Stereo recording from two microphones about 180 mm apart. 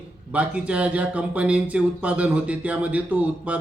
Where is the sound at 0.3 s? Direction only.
5° right (ahead or behind).